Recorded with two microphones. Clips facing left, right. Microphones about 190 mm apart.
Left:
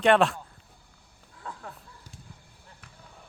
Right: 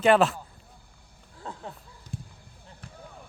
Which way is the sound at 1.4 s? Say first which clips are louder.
Right 2 dB; 25° right (ahead or behind).